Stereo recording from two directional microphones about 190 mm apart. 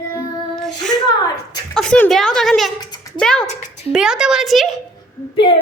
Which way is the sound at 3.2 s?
5° left (ahead or behind).